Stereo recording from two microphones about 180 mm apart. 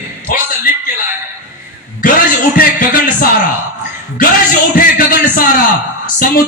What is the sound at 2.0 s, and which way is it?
A man's voice, 50° left (ahead or behind).